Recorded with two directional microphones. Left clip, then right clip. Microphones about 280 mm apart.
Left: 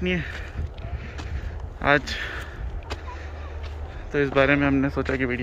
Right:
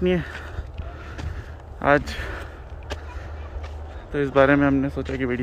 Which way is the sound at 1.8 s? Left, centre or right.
Centre.